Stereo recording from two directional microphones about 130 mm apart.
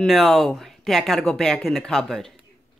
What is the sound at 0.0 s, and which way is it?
Speech, centre (ahead or behind).